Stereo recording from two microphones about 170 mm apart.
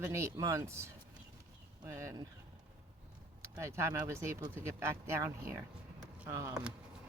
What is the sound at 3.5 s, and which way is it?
Speech, 15° right (ahead or behind).